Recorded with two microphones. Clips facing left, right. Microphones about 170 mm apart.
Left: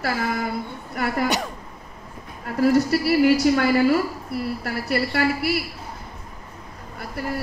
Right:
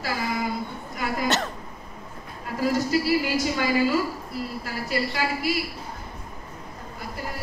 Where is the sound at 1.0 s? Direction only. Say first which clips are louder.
Left 5 dB; 65° left (ahead or behind).